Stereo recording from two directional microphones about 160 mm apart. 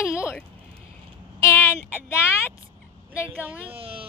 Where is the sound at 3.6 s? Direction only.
35° right (ahead or behind).